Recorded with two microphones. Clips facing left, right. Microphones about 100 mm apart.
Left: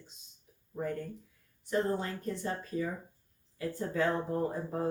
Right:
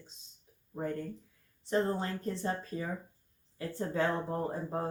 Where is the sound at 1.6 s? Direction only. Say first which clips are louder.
Even; 30° right (ahead or behind).